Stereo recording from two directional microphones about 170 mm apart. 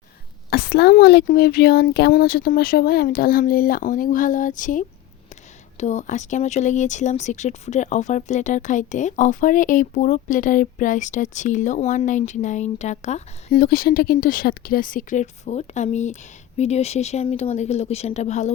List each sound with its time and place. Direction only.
0.5 s speech: 70° left (ahead or behind); by 13.2 s 40° left (ahead or behind)
13.5 s speech: 60° left (ahead or behind); by 18.5 s 40° left (ahead or behind)